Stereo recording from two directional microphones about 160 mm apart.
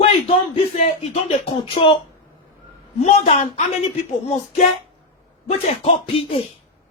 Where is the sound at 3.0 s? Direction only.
40° left (ahead or behind).